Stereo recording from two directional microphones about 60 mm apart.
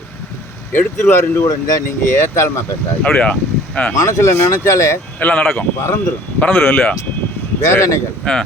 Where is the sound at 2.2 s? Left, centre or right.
Left.